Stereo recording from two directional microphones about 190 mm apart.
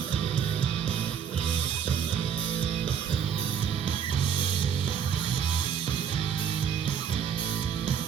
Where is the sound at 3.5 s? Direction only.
25° left (ahead or behind).